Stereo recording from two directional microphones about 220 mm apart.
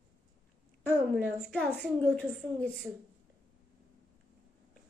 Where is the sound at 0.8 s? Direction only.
10° left (ahead or behind).